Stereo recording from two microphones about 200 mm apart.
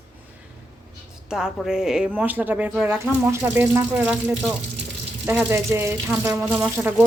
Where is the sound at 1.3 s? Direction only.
5° right (ahead or behind).